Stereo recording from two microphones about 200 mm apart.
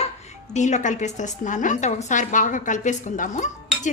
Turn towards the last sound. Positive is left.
turn(degrees=40)  # may be behind; listen again after turning